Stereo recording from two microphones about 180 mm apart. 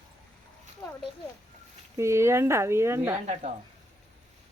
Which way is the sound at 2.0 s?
15° right (ahead or behind).